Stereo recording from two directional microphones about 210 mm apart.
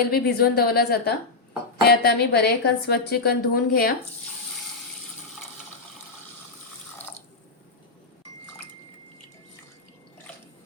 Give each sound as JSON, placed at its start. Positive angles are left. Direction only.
{"t": 0.0, "sound": "a woman's voice", "side_deg": 45}